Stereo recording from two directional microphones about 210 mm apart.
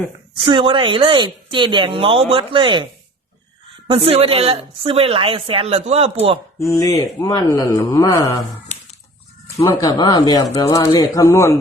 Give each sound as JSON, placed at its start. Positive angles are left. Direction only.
{"t": 0.3, "sound": "a woman's voice", "side_deg": -25}
{"t": 3.8, "sound": "a woman's voice", "side_deg": -25}
{"t": 6.7, "sound": "speech", "side_deg": 15}
{"t": 9.6, "sound": "speech", "side_deg": 15}